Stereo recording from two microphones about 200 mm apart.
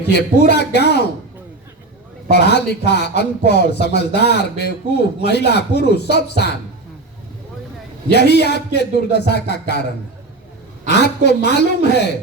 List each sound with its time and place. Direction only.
0.1 s speech: 55° left (ahead or behind)
2.3 s speech: 55° left (ahead or behind)
8.1 s speech: 55° left (ahead or behind)
10.8 s speech: 55° left (ahead or behind)